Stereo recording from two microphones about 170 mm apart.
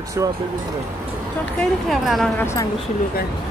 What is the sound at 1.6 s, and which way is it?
Speech, centre (ahead or behind).